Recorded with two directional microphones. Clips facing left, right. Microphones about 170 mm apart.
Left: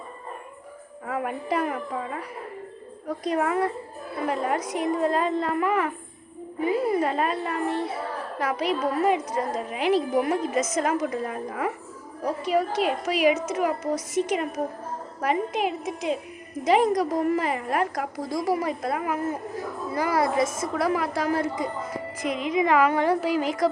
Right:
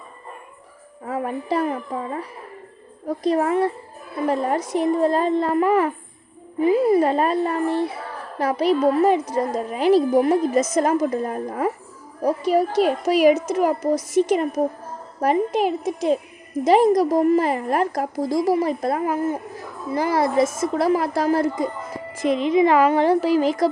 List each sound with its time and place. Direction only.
1.0 s a woman's voice: 30° right (ahead or behind)
15.2 s a woman's voice: 35° right (ahead or behind)